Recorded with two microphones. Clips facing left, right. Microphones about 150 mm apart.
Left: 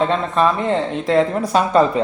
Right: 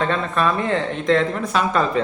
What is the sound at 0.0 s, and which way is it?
Speech, 25° left (ahead or behind).